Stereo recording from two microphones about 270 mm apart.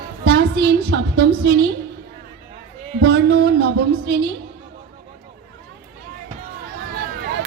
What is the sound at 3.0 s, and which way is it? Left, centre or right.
Speech, right.